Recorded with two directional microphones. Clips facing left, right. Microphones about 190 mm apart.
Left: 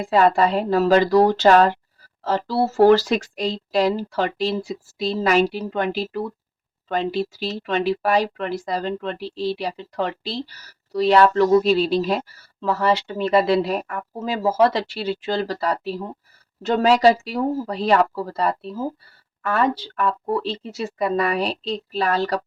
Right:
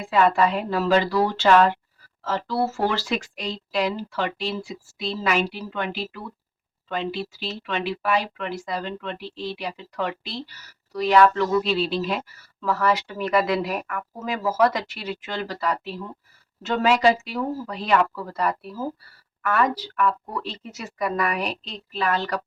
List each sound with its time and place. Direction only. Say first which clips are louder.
0.0 s speech: left 3 dB; 35° left (ahead or behind)